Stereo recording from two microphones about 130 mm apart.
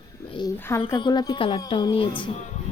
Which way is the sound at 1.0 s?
30° left (ahead or behind).